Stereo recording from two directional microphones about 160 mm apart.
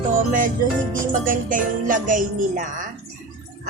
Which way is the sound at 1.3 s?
55° right (ahead or behind).